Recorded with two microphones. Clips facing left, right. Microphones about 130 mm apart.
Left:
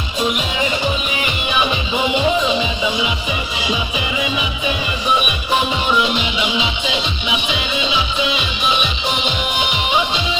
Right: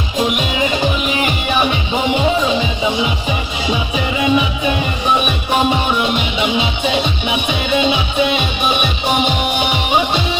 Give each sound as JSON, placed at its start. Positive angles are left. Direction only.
{"t": 5.7, "sound": "music", "side_deg": -50}